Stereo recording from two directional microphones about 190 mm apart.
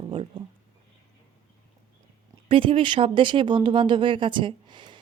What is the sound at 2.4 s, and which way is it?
Speech, 30° right (ahead or behind).